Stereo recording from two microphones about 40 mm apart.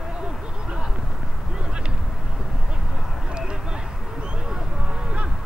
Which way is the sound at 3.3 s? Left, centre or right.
Right.